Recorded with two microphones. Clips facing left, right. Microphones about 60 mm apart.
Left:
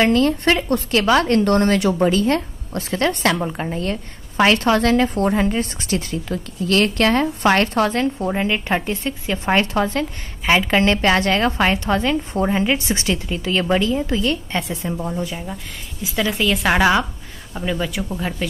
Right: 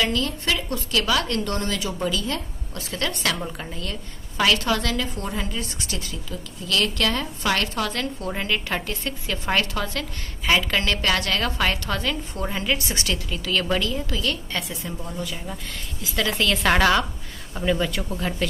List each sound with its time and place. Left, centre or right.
0.0 s a woman's voice: left
15.3 s a woman's voice: centre